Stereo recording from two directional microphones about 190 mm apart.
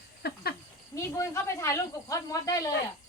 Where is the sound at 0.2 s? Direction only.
55° left (ahead or behind).